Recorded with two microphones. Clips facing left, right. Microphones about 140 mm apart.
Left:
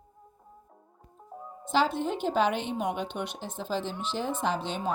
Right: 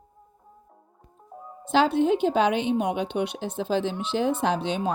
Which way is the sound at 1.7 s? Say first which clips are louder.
Right 6 dB; 70° right (ahead or behind).